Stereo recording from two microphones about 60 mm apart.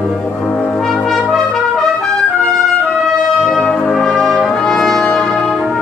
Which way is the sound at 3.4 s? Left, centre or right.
Centre.